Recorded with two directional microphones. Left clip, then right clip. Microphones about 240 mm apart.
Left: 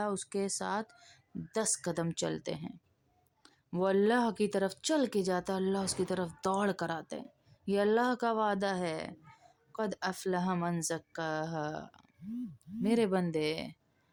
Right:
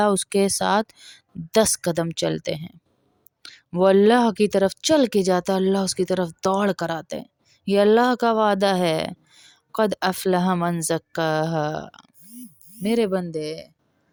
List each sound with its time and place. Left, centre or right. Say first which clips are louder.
0.0 s speech: right 15 dB; right
13.2 s speech: right 4 dB; centre